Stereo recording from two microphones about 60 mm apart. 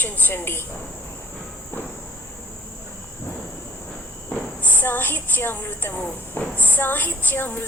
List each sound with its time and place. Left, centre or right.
0.0 s a woman's voice: left
4.6 s a woman's voice: left